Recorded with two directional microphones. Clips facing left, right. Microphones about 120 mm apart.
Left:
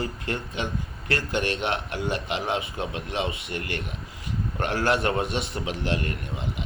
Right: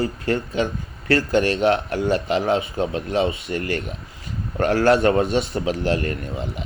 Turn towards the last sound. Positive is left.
turn(degrees=-40)  # may be behind; listen again after turning